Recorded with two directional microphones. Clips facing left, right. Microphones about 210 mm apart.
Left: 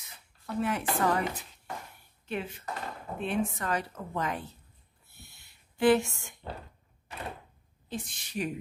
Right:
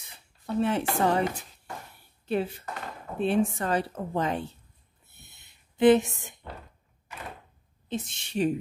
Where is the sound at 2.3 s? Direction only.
35° right (ahead or behind).